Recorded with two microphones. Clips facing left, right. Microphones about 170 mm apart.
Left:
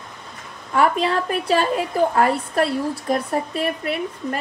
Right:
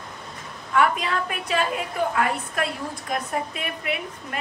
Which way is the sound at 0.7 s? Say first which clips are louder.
Left 4 dB; 35° left (ahead or behind).